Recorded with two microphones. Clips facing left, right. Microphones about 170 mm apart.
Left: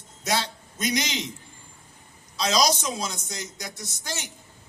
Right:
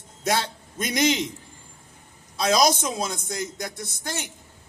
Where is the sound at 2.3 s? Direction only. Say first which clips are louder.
Right 3 dB; 55° right (ahead or behind).